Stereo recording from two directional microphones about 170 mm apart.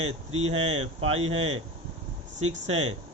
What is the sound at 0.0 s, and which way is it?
Speech, 35° right (ahead or behind).